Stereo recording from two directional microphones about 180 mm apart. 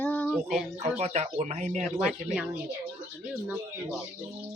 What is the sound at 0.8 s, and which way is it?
Speech, 40° right (ahead or behind).